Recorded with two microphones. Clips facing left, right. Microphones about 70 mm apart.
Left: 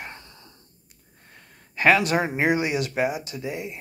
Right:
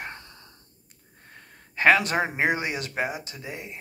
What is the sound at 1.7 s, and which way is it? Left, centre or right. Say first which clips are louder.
Speech: left 1 dB; right.